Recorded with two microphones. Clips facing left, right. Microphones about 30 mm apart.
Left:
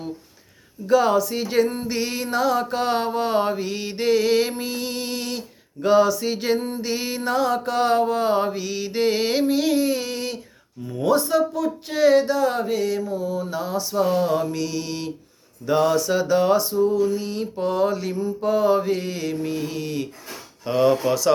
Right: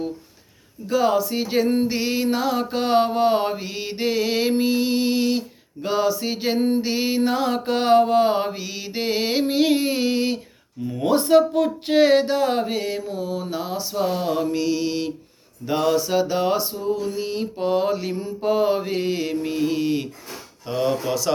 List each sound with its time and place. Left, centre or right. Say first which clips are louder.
0.9 s mantra: left 2 dB; centre
1.6 s mantra: right 5 dB; right
1.9 s mantra: right 2 dB; centre
6.6 s music: right 8 dB; right
6.8 s mantra: right 4 dB; centre
9.4 s mantra: right 3 dB; right
10.8 s speech: right 5 dB; right
11.2 s music: right 5 dB; right
13.0 s mantra: left 2 dB; right
13.5 s mantra: left 1 dB; right
18.1 s music: left 2 dB; right
18.3 s mantra: left 1 dB; right
20.7 s speech: left 4 dB; centre